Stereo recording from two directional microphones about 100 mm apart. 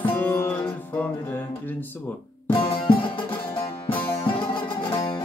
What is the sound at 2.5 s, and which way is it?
Music, 65° left (ahead or behind).